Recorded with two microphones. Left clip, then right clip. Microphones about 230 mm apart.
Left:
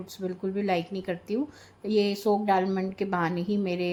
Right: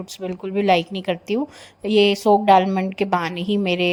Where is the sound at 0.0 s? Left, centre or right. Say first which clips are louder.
Right 4 dB; right.